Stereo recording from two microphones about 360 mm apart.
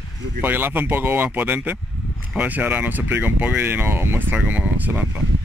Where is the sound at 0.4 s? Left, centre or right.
Centre.